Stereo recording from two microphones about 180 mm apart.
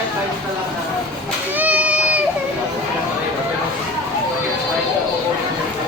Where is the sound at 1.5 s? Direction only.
10° right (ahead or behind).